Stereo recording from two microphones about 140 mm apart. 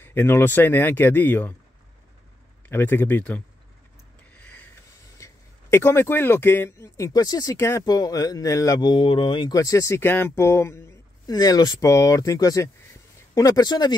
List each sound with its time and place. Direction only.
0.0 s speech: 15° left (ahead or behind)
2.7 s speech: 15° left (ahead or behind)
4.3 s a sound: 10° left (ahead or behind)
5.1 s speech: 20° left (ahead or behind); by 9.5 s 40° left (ahead or behind)
9.5 s speech: 25° left (ahead or behind)